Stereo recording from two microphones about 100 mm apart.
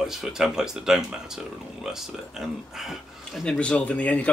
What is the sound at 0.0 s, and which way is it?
Speech, 5° right (ahead or behind).